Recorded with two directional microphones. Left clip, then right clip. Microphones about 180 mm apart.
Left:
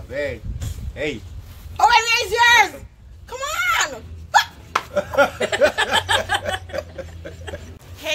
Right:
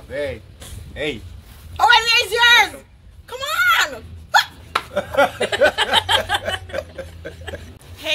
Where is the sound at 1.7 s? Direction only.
10° left (ahead or behind).